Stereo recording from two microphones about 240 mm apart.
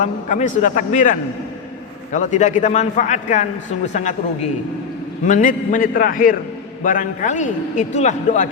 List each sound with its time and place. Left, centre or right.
0.0 s a man's voice: left
5.2 s a man's voice: left